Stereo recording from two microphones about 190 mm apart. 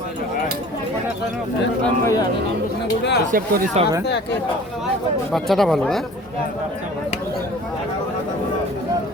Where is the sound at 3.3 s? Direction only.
45° right (ahead or behind).